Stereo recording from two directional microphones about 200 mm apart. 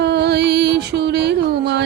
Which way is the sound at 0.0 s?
60° right (ahead or behind).